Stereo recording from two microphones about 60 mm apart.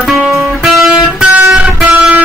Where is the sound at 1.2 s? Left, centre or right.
Centre.